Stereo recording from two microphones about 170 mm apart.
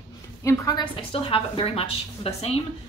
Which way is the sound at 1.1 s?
35° left (ahead or behind).